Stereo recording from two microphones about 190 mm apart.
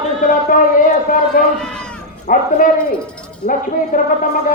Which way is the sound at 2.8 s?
5° left (ahead or behind).